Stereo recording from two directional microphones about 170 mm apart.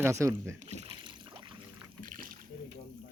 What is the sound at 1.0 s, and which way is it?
Boat, 30° right (ahead or behind).